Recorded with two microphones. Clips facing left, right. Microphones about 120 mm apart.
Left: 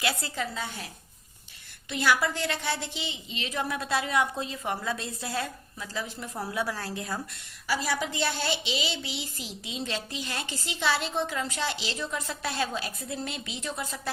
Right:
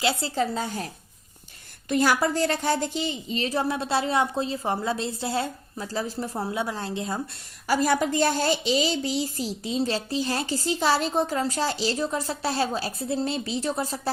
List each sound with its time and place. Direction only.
0.0 s a woman's voice: 30° right (ahead or behind)
1.9 s a woman's voice: 40° right (ahead or behind); by 7.2 s 25° right (ahead or behind)
7.7 s a woman's voice: 50° right (ahead or behind)